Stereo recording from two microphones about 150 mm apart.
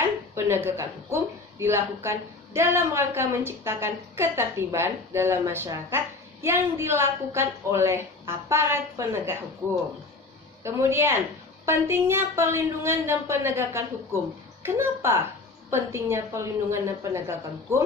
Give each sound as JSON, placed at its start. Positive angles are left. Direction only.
{"t": 0.3, "sound": "a child's voice", "side_deg": -15}
{"t": 10.6, "sound": "a child's voice", "side_deg": -15}